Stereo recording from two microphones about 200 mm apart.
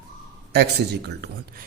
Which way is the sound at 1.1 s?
55° right (ahead or behind).